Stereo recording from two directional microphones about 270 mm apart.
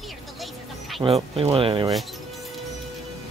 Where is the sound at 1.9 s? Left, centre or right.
Centre.